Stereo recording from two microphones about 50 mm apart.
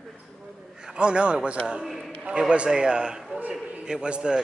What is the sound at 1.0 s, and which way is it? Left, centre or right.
Speech, right.